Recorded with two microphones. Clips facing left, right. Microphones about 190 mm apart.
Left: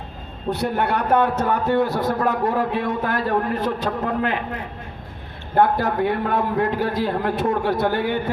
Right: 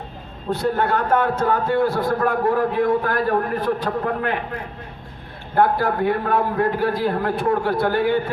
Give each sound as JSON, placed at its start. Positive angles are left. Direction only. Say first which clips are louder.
{"t": 0.5, "sound": "a man's voice", "louder": "right 2 dB", "side_deg": 20}
{"t": 5.5, "sound": "a man's voice", "louder": "even", "side_deg": 20}